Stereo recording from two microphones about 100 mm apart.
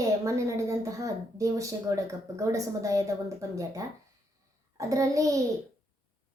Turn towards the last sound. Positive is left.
turn(degrees=-35)  # may be behind; listen again after turning